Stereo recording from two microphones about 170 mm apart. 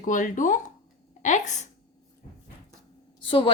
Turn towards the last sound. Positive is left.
turn(degrees=30)  # may be behind; listen again after turning